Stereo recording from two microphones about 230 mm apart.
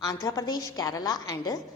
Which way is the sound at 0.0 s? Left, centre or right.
Centre.